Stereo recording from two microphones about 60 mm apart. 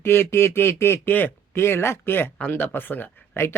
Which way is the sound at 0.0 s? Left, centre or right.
Left.